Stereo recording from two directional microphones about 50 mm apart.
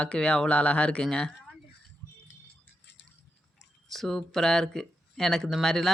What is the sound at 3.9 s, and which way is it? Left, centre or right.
Speech, centre.